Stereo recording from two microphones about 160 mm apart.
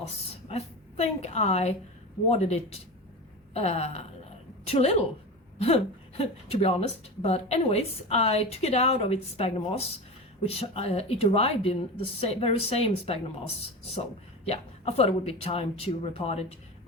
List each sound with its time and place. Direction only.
0.4 s a woman's voice: 40° left (ahead or behind)
14.4 s a woman's voice: 40° left (ahead or behind)